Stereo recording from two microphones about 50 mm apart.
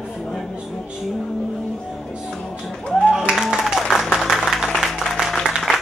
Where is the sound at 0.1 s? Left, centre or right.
Centre.